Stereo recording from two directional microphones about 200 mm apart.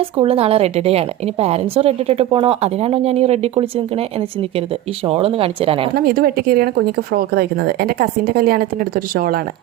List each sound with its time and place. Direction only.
0.2 s a woman's voice: 30° right (ahead or behind)
5.0 s speech: 30° right (ahead or behind)
5.9 s speech: 50° right (ahead or behind)